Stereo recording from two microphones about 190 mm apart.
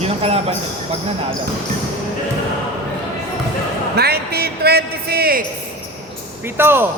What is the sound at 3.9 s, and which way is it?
A man's voice, 55° right (ahead or behind).